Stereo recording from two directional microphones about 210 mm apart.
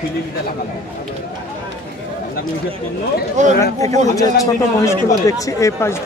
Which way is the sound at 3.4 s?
35° right (ahead or behind).